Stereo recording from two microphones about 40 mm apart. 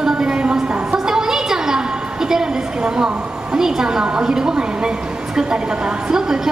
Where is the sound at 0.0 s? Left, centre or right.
Right.